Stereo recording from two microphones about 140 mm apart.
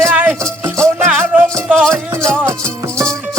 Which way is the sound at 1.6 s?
5° left (ahead or behind).